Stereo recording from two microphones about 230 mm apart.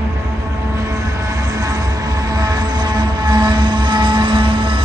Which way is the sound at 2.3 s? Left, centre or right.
Centre.